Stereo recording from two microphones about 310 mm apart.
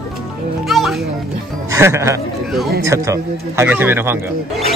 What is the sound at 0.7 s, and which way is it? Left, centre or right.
Music, centre.